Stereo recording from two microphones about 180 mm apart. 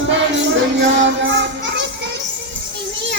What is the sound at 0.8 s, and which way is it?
Music, 90° right.